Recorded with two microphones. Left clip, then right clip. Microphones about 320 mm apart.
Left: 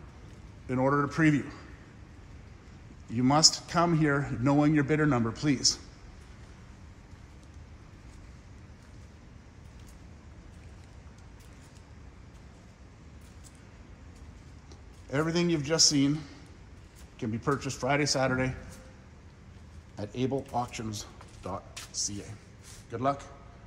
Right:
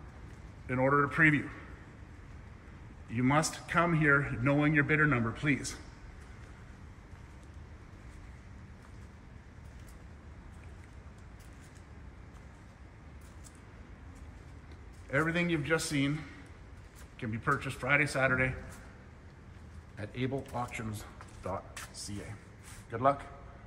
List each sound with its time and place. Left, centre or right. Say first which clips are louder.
0.7 s a man's voice: left 1 dB; centre
3.1 s a man's voice: left 6 dB; centre
15.0 s a man's voice: left 2 dB; centre
17.2 s a man's voice: left 1 dB; centre
20.0 s a man's voice: left 5 dB; centre